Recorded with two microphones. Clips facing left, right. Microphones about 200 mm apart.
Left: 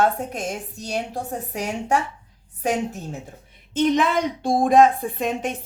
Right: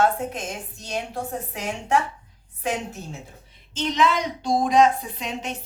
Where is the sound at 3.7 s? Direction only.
55° left (ahead or behind).